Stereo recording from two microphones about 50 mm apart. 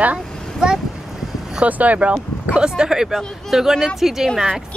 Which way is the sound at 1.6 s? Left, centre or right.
Right.